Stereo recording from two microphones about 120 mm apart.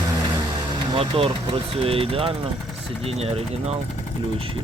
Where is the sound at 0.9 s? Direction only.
50° right (ahead or behind).